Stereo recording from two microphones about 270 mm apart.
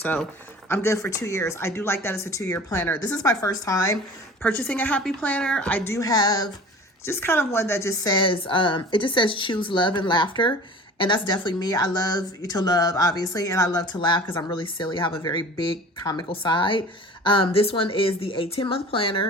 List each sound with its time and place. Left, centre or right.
0.0 s speech: centre